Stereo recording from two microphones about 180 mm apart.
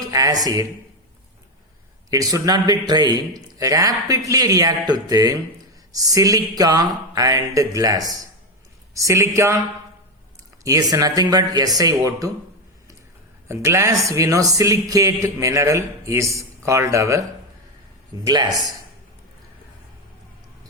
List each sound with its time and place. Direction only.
0.1 s a man's voice: 20° right (ahead or behind)
2.0 s a man's voice: 20° right (ahead or behind)
10.6 s a man's voice: 20° right (ahead or behind)
13.5 s a man's voice: 15° right (ahead or behind)
18.3 s a man's voice: 20° right (ahead or behind)